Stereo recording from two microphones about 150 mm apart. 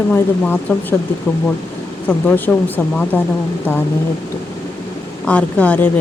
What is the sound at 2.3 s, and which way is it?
A woman's voice, 10° left (ahead or behind).